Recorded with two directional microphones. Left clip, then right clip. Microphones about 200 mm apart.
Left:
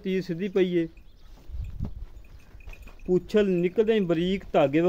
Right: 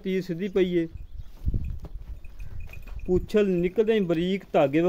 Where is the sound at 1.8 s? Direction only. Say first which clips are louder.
Left 6 dB; 15° right (ahead or behind).